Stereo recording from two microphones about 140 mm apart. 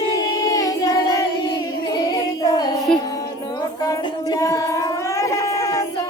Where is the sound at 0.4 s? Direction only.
25° left (ahead or behind).